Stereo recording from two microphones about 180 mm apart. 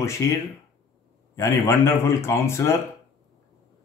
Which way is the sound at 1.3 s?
15° left (ahead or behind).